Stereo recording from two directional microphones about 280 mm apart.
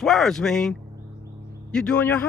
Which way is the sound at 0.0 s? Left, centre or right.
Centre.